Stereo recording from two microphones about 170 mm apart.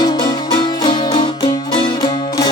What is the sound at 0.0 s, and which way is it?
Music, 25° left (ahead or behind).